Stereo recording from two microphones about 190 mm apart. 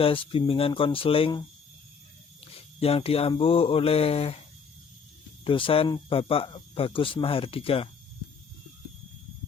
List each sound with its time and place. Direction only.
0.0 s speech: 30° left (ahead or behind)
5.5 s speech: 25° left (ahead or behind)